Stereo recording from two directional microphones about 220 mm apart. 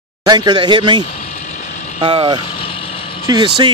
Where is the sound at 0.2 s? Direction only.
20° right (ahead or behind).